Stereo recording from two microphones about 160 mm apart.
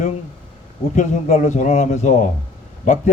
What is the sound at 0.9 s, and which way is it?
A man's voice, 50° left (ahead or behind).